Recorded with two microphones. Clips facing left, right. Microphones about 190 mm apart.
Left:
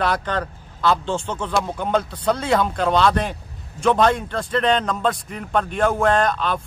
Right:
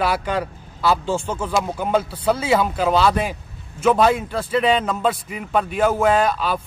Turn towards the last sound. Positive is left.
turn(degrees=-5)  # may be behind; listen again after turning